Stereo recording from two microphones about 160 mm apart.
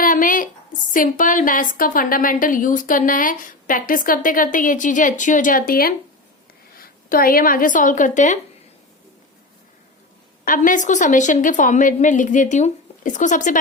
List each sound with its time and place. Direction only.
0.0 s a woman's voice: 60° left (ahead or behind)
10.4 s a woman's voice: 55° left (ahead or behind)